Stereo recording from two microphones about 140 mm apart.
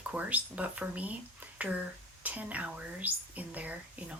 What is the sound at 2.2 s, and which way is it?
Speech, 10° right (ahead or behind).